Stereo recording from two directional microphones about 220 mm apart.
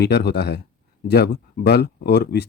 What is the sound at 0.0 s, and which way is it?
Speech, 50° left (ahead or behind).